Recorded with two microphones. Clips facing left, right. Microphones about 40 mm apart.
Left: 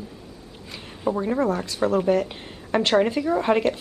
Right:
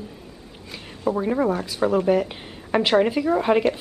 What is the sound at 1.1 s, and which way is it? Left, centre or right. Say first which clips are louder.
A woman's voice: right 1 dB; centre.